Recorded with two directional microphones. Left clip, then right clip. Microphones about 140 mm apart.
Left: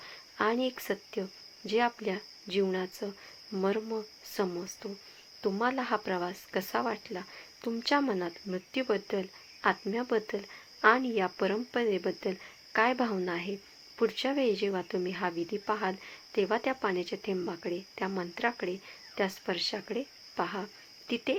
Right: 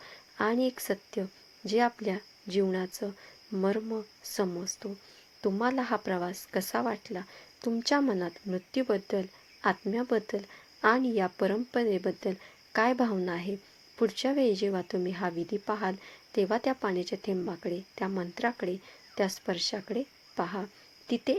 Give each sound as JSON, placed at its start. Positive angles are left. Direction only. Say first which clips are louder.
{"t": 0.0, "sound": "speech", "louder": "even", "side_deg": -40}